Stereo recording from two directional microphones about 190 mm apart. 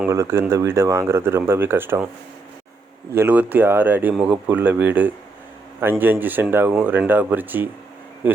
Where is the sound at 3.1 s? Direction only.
10° right (ahead or behind).